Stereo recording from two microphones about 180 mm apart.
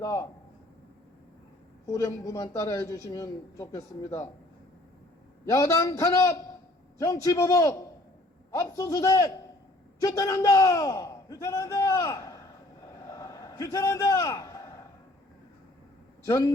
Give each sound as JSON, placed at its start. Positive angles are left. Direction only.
{"t": 0.0, "sound": "a man's voice", "side_deg": 15}
{"t": 1.9, "sound": "a man's voice", "side_deg": 15}
{"t": 5.5, "sound": "a man's voice", "side_deg": 15}
{"t": 13.0, "sound": "a sound", "side_deg": 15}
{"t": 16.2, "sound": "a man's voice", "side_deg": 15}